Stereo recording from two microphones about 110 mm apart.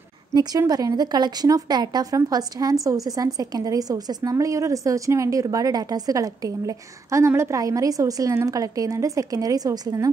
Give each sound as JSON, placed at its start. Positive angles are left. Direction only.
{"t": 0.3, "sound": "a woman's voice", "side_deg": -35}